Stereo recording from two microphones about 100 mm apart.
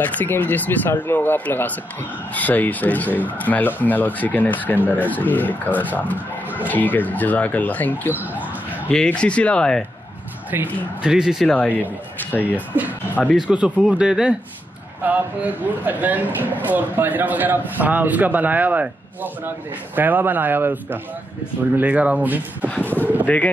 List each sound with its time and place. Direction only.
0.0 s speech: 15° left (ahead or behind)
10.5 s a man's voice: 20° right (ahead or behind)
11.1 s a man's voice: 5° right (ahead or behind)
11.4 s speech: 15° left (ahead or behind)
13.5 s a man's voice: 5° right (ahead or behind)
23.2 s speech: 15° left (ahead or behind)